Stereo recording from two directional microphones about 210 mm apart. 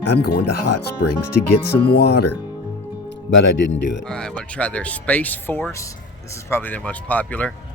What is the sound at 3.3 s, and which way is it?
Speech, 60° left (ahead or behind).